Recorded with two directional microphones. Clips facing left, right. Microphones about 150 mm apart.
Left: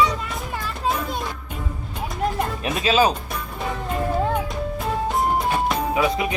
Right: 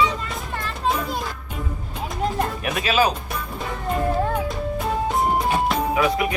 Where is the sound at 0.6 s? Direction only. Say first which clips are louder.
Right 1 dB; centre (ahead or behind).